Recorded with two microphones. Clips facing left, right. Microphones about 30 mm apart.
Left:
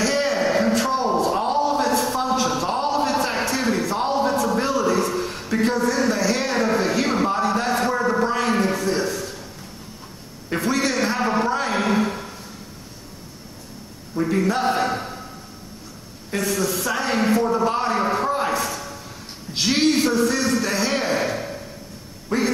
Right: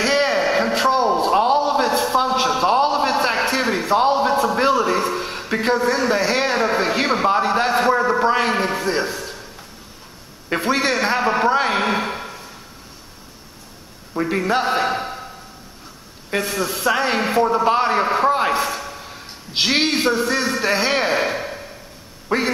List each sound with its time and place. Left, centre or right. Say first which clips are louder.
0.0 s a sound: right 3 dB; right
10.5 s a man's voice: right 3 dB; right
14.1 s a man's voice: right 1 dB; right
16.3 s a man's voice: right 1 dB; right